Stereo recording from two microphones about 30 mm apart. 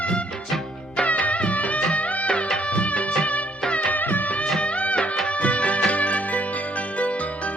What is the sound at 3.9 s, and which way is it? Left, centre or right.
Music of bollywood, left.